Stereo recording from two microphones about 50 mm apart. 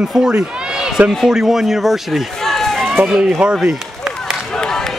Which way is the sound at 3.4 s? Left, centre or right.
Right.